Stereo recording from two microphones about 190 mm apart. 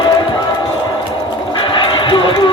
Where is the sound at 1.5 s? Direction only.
25° left (ahead or behind).